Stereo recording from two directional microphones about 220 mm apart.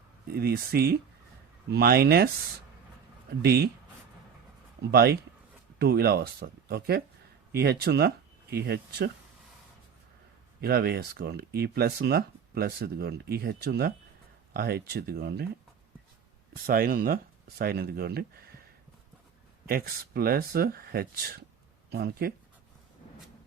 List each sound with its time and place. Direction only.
0.3 s speech: 45° right (ahead or behind)
4.8 s speech: 45° right (ahead or behind)
10.6 s speech: 45° right (ahead or behind)
16.6 s speech: 40° right (ahead or behind)
19.6 s speech: 45° right (ahead or behind)